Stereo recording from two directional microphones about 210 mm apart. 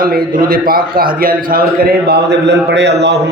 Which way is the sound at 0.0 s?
40° right (ahead or behind).